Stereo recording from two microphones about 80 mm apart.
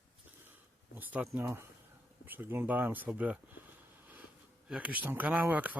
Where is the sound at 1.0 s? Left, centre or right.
Right.